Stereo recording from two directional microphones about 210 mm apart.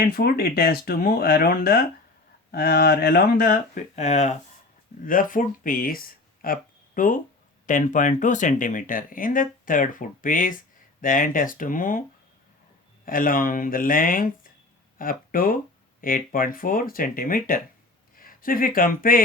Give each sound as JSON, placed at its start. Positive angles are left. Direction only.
{"t": 0.1, "sound": "speech", "side_deg": 45}
{"t": 13.1, "sound": "speech", "side_deg": 40}